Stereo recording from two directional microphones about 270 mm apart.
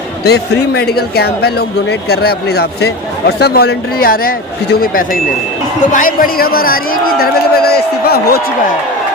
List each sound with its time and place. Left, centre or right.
0.3 s speech: left